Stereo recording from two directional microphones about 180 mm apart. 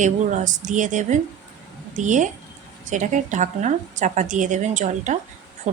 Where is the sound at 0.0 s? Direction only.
45° right (ahead or behind).